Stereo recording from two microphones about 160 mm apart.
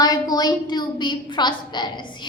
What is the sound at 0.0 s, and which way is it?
A woman's voice, 25° left (ahead or behind).